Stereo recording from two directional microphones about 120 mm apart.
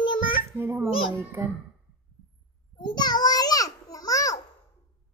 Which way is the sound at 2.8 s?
35° left (ahead or behind).